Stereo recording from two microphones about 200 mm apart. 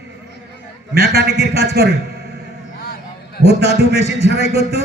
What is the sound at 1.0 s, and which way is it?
Speech, 55° right (ahead or behind).